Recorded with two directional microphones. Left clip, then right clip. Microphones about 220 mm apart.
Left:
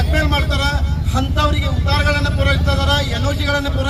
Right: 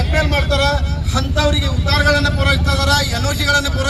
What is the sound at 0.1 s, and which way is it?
Vehicle, 20° right (ahead or behind).